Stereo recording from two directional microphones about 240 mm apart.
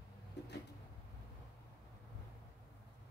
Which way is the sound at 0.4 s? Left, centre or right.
Left.